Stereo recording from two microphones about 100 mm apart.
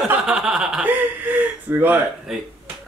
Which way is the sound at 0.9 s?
15° right (ahead or behind).